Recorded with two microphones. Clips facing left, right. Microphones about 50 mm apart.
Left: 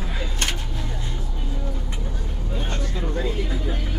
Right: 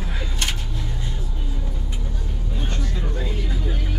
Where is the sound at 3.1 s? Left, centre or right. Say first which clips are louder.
Left 3 dB; centre.